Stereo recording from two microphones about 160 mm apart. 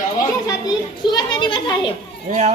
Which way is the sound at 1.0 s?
30° left (ahead or behind).